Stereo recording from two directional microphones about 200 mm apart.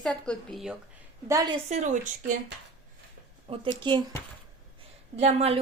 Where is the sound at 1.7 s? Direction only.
35° right (ahead or behind).